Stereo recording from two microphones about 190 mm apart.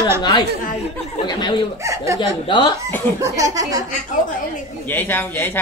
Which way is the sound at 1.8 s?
15° right (ahead or behind).